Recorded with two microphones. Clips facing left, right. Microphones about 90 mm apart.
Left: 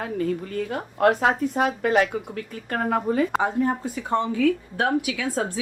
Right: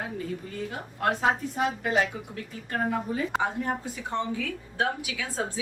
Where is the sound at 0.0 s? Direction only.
65° left (ahead or behind).